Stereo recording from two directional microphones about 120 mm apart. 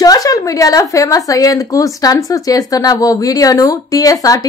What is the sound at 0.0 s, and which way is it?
Speech, 30° left (ahead or behind).